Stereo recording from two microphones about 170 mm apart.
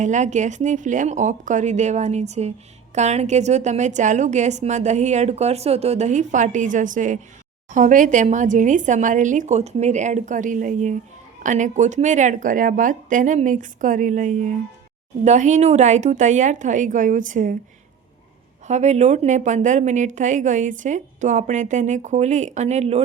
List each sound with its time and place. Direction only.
0.0 s speech: 45° right (ahead or behind)
18.7 s speech: 40° right (ahead or behind)